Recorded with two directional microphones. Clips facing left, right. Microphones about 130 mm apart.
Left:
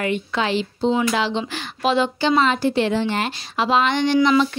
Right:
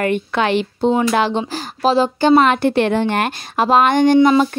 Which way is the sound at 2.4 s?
60° right (ahead or behind).